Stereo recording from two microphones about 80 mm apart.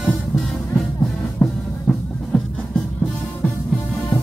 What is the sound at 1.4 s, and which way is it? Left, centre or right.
Music, centre.